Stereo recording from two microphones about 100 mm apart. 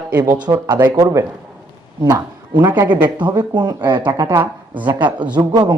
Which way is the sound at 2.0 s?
40° right (ahead or behind).